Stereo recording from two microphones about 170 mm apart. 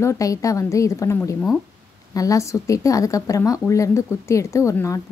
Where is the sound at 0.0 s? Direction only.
20° left (ahead or behind).